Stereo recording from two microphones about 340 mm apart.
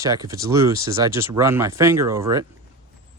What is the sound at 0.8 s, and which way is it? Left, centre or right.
Speech, centre.